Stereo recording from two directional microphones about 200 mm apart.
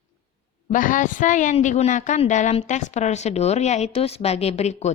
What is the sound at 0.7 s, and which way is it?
A woman's voice, 40° left (ahead or behind).